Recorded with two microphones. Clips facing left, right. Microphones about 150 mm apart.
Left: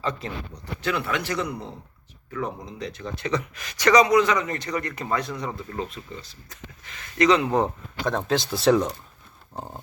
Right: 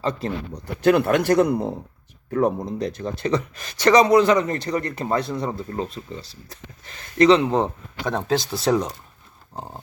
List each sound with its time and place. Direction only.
0.0 s speech: 35° right (ahead or behind)
8.0 s speech: centre (ahead or behind)